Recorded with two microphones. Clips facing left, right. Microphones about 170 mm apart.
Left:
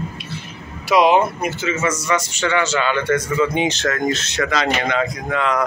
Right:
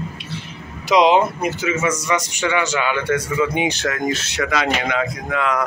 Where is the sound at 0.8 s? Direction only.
20° right (ahead or behind).